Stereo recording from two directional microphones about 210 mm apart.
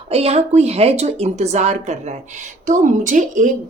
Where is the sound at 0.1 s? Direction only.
30° right (ahead or behind).